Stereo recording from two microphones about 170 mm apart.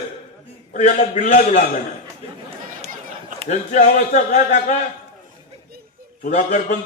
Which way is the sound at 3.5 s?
45° left (ahead or behind).